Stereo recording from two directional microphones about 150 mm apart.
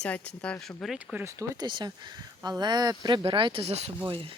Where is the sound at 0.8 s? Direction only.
10° right (ahead or behind).